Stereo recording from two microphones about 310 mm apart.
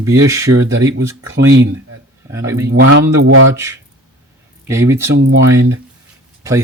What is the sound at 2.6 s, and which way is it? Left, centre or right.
Speech, right.